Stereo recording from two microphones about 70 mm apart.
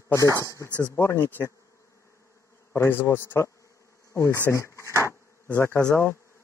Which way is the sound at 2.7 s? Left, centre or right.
Left.